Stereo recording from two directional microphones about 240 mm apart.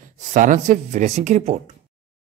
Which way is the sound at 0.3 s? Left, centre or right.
Right.